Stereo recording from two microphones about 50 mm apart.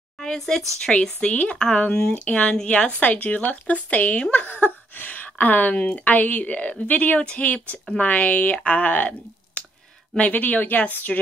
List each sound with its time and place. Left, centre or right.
0.2 s speech: centre
2.2 s speech: left
3.0 s speech: left